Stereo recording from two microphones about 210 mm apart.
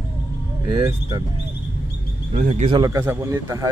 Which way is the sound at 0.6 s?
15° right (ahead or behind).